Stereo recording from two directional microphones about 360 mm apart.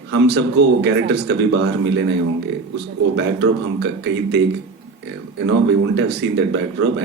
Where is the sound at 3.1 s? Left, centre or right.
Right.